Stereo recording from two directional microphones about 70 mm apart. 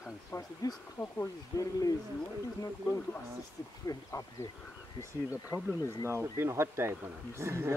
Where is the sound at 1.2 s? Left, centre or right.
Left.